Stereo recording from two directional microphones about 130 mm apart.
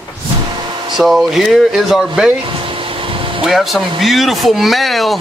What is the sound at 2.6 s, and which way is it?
Air conditioning, 45° right (ahead or behind).